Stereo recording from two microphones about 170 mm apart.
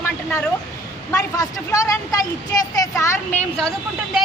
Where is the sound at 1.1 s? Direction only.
20° left (ahead or behind).